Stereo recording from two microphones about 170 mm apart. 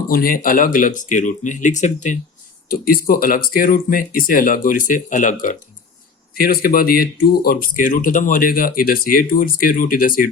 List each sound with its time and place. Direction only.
0.1 s speech: 55° left (ahead or behind)
2.6 s speech: 60° left (ahead or behind)
6.3 s speech: 60° left (ahead or behind)